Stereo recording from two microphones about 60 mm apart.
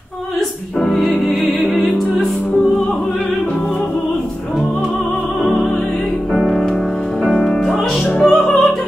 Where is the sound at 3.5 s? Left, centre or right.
Centre.